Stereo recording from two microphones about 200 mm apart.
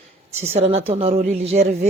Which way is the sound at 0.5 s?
30° right (ahead or behind).